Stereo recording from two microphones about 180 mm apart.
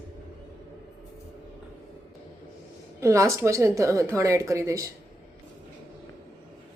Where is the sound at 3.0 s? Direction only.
15° right (ahead or behind).